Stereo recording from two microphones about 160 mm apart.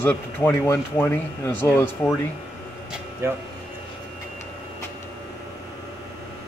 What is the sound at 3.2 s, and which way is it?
Speech, 15° right (ahead or behind).